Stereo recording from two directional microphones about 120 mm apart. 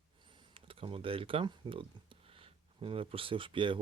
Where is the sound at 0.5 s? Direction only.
50° right (ahead or behind).